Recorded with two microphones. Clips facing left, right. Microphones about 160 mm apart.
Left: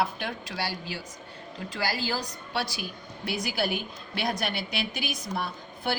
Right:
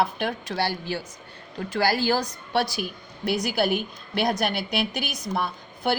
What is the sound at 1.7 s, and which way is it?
Speech, 60° right (ahead or behind).